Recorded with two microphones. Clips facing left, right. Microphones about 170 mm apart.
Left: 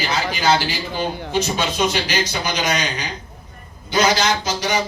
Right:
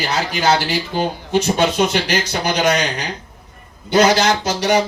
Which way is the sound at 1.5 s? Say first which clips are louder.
Right 4 dB; 65° right (ahead or behind).